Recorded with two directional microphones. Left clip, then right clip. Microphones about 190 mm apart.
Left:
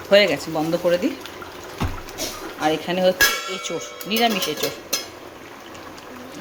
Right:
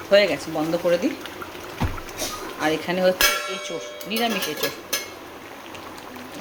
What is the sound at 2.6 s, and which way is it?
Speech, centre (ahead or behind).